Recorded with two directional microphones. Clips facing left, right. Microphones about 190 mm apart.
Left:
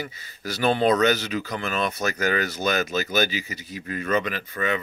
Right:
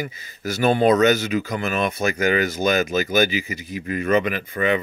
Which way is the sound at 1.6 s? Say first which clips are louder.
Right 4 dB; 15° right (ahead or behind).